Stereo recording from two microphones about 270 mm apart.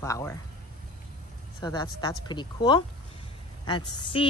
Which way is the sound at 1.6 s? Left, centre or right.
Centre.